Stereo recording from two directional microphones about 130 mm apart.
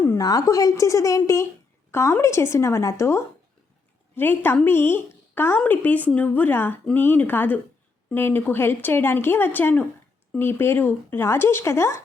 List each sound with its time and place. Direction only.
0.0 s speech: 25° left (ahead or behind)